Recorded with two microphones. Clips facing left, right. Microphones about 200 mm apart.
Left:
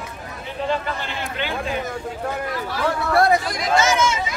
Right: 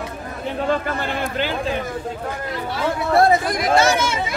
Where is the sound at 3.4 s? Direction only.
55° right (ahead or behind).